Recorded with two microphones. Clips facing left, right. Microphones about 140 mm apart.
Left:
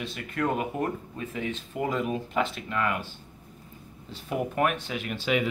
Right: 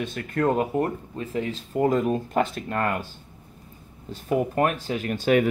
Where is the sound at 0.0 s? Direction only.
50° right (ahead or behind).